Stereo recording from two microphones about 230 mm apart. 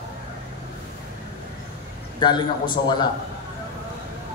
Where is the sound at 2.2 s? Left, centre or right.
Centre.